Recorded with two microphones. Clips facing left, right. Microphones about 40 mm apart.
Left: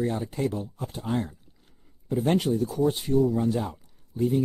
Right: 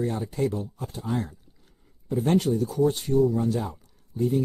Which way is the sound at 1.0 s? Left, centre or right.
Left.